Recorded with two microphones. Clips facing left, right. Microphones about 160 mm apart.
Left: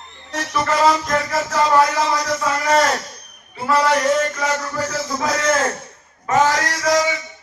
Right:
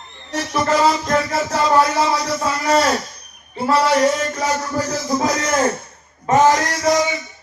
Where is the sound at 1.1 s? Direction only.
30° right (ahead or behind).